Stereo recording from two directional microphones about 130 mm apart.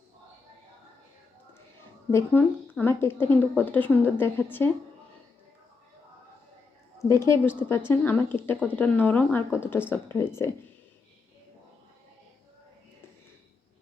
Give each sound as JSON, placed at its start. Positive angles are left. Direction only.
{"t": 2.0, "sound": "a woman's voice", "side_deg": 20}
{"t": 7.1, "sound": "a woman's voice", "side_deg": 20}